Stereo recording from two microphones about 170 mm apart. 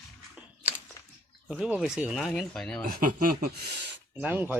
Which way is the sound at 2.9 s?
60° right (ahead or behind).